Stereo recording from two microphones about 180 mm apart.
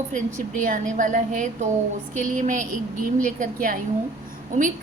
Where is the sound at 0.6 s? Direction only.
45° right (ahead or behind).